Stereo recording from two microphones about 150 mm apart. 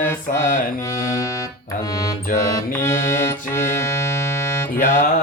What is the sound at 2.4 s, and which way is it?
Music, 20° left (ahead or behind).